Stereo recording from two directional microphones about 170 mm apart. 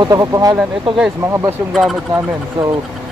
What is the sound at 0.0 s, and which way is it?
Speech, 20° right (ahead or behind).